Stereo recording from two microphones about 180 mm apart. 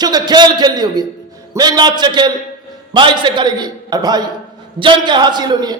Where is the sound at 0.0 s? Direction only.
20° right (ahead or behind).